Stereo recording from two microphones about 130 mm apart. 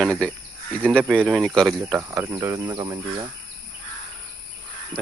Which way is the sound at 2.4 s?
30° right (ahead or behind).